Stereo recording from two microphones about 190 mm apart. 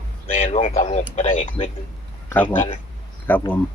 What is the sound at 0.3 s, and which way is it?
A man's voice, 35° left (ahead or behind).